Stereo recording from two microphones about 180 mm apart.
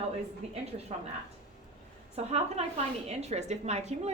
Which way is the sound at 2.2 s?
35° right (ahead or behind).